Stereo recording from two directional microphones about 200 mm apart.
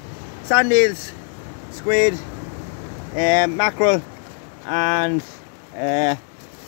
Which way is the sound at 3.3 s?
20° left (ahead or behind).